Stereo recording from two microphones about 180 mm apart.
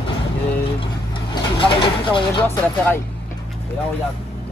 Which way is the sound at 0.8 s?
30° left (ahead or behind).